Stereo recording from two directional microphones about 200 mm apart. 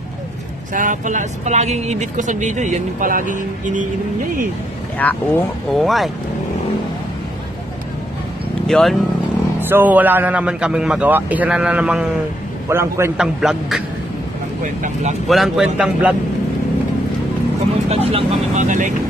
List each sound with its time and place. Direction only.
0.7 s speech: 40° right (ahead or behind)
4.9 s speech: 10° left (ahead or behind)
8.6 s speech: centre (ahead or behind)
9.6 s a man's voice: 10° right (ahead or behind)
13.4 s speech: centre (ahead or behind)
14.6 s speech: 40° right (ahead or behind)
15.2 s speech: centre (ahead or behind)
17.8 s vehicle: 30° right (ahead or behind)